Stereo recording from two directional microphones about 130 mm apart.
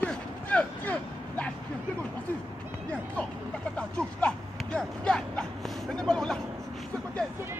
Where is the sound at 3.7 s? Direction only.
10° left (ahead or behind).